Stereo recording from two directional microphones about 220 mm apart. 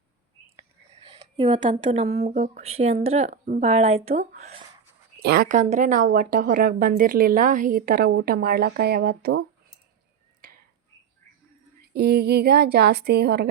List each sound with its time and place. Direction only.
1.1 s speech: 25° right (ahead or behind)
5.2 s a woman's voice: 45° right (ahead or behind)
11.9 s speech: 45° right (ahead or behind)